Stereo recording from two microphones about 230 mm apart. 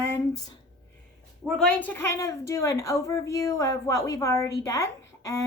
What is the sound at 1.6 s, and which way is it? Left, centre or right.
A woman's voice, centre.